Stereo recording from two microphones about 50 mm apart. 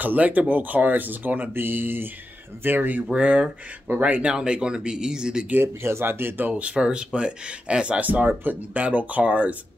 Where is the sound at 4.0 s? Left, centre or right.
Right.